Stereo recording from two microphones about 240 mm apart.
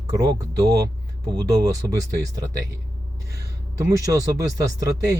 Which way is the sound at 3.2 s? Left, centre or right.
Right.